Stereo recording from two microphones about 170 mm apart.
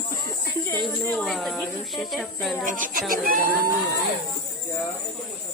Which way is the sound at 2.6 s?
50° right (ahead or behind).